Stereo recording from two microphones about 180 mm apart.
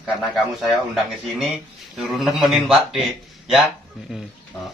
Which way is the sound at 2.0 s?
Centre (ahead or behind).